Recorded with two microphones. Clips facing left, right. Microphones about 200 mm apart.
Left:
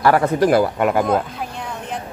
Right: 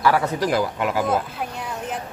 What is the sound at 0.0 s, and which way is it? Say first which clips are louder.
A man's voice: left 5 dB; 50° left (ahead or behind).